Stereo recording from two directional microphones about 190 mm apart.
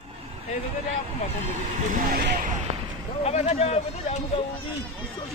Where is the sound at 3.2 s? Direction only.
35° left (ahead or behind).